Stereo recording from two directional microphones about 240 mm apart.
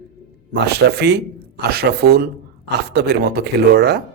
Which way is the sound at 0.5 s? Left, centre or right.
Right.